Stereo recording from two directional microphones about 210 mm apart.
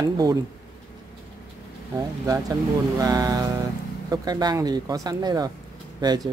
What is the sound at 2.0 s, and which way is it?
Speech, 15° right (ahead or behind).